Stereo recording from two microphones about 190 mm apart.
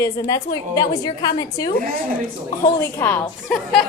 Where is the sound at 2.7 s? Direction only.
10° left (ahead or behind).